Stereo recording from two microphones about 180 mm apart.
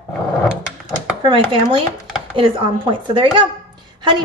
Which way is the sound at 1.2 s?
30° right (ahead or behind).